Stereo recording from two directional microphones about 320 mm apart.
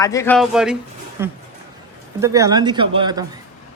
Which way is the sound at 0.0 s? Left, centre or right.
Centre.